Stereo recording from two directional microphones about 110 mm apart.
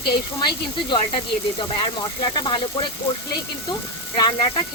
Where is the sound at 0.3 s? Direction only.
45° left (ahead or behind).